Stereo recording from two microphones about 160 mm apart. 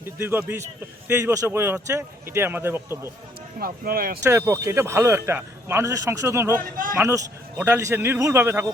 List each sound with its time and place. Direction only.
0.0 s speech: 15° right (ahead or behind)
3.6 s speech: 65° right (ahead or behind)
4.2 s speech: 15° right (ahead or behind)